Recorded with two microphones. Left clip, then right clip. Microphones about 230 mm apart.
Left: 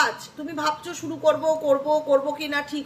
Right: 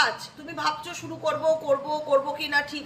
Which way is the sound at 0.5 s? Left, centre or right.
Centre.